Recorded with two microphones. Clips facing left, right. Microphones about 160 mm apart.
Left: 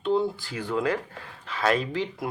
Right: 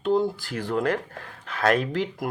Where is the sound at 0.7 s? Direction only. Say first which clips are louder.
Right 1 dB; 55° right (ahead or behind).